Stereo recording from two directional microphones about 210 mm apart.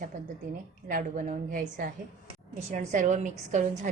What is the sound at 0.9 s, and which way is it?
A woman's voice, 40° right (ahead or behind).